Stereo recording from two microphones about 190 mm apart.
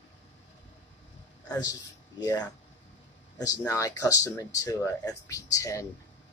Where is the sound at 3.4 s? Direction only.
15° left (ahead or behind).